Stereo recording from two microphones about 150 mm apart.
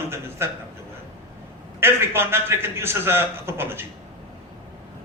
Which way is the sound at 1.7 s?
15° right (ahead or behind).